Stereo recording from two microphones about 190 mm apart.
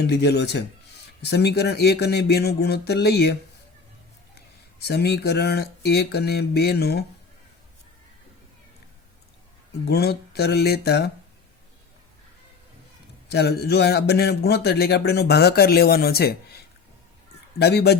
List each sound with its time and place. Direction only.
0.0 s speech: 60° left (ahead or behind)
4.8 s speech: 60° left (ahead or behind)
9.8 s speech: 55° left (ahead or behind)
13.3 s speech: 60° left (ahead or behind)
17.6 s speech: 60° left (ahead or behind)